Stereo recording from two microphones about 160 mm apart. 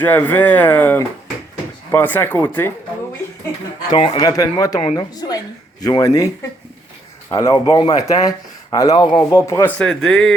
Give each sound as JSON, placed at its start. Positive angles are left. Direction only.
{"t": 0.0, "sound": "speech", "side_deg": 10}
{"t": 3.8, "sound": "speech", "side_deg": 30}